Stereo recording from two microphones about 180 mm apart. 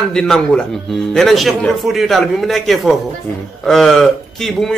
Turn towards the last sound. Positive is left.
turn(degrees=0)  # may be behind; listen again after turning